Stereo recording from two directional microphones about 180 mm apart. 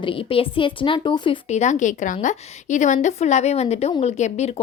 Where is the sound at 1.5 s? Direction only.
40° left (ahead or behind).